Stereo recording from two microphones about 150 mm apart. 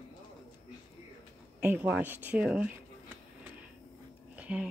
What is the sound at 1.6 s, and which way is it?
Speech, 10° right (ahead or behind).